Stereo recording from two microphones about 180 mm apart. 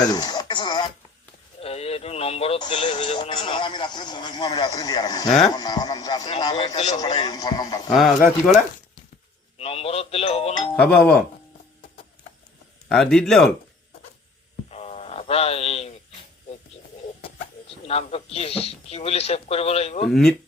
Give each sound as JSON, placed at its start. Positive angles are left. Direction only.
{"t": 0.0, "sound": "a sound", "side_deg": 20}
{"t": 1.6, "sound": "speech", "side_deg": 35}
{"t": 6.7, "sound": "speech", "side_deg": 40}
{"t": 7.0, "sound": "speech", "side_deg": 25}
{"t": 9.6, "sound": "speech", "side_deg": 35}
{"t": 10.8, "sound": "speech", "side_deg": 5}
{"t": 12.9, "sound": "speech", "side_deg": 5}
{"t": 14.7, "sound": "a sound", "side_deg": 35}
{"t": 17.8, "sound": "speech", "side_deg": 35}